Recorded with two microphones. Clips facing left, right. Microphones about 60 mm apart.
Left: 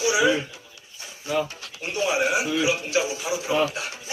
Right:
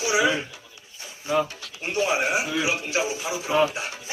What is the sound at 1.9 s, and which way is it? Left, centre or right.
A man's voice, right.